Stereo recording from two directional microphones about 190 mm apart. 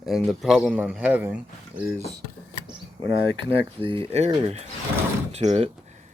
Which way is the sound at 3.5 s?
30° right (ahead or behind).